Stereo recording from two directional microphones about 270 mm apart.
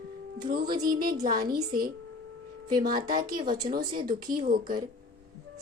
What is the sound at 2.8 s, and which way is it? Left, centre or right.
Speech, right.